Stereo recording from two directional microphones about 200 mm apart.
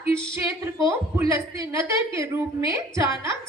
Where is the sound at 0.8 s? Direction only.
15° right (ahead or behind).